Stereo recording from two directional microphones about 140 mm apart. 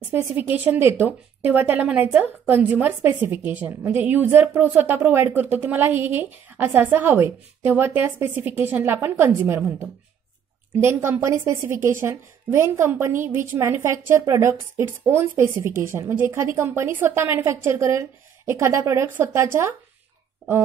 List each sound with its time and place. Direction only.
0.1 s a woman's voice: 15° right (ahead or behind)